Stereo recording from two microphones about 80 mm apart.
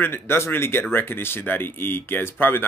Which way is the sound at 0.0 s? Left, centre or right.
Left.